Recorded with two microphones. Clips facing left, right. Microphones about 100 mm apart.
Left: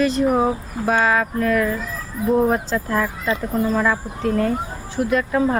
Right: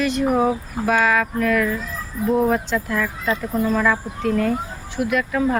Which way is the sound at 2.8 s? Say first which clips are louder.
Left 1 dB; 30° left (ahead or behind).